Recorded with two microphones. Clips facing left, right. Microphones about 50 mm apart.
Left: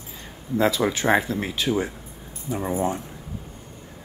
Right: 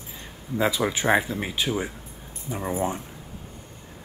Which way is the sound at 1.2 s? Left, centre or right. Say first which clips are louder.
Left 2 dB; centre.